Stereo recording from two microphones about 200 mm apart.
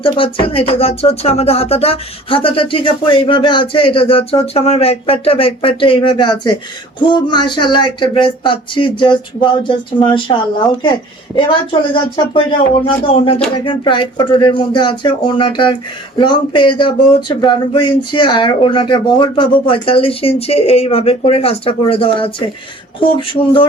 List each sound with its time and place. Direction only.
0.0 s speech: 25° left (ahead or behind)
11.3 s speech: 25° left (ahead or behind)